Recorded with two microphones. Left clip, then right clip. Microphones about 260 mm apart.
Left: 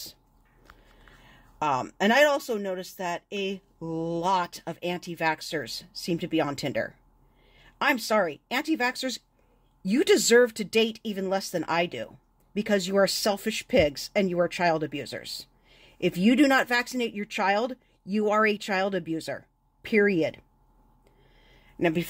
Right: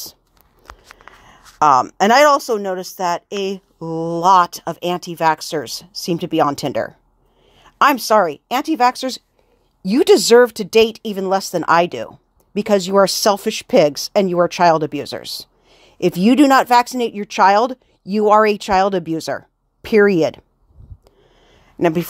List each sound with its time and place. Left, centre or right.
1.2 s speech: right
21.7 s speech: right